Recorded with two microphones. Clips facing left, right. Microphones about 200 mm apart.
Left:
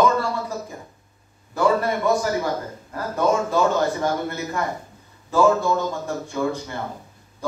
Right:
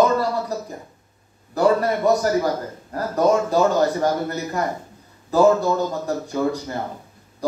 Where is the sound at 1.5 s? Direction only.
40° right (ahead or behind).